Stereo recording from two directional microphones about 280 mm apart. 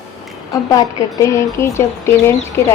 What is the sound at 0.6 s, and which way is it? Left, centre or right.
Speech, centre.